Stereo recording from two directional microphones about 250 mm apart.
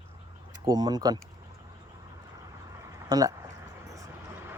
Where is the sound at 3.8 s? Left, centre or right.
Centre.